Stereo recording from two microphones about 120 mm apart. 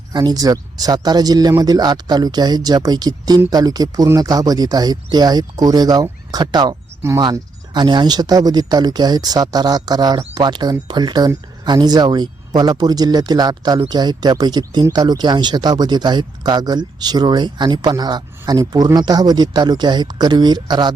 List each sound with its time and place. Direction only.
0.1 s speech: 35° right (ahead or behind)